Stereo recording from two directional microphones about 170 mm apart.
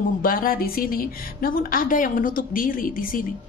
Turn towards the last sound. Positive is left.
turn(degrees=55)  # may be behind; listen again after turning